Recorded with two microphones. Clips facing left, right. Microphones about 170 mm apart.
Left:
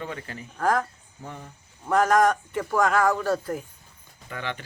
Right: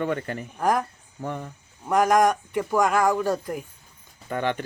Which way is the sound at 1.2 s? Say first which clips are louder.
Right 8 dB; 60° right (ahead or behind).